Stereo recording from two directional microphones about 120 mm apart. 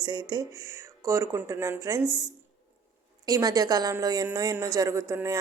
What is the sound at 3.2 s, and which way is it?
A woman's voice, 30° right (ahead or behind).